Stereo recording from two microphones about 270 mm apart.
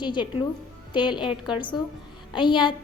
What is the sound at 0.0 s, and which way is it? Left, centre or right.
A woman's voice, centre.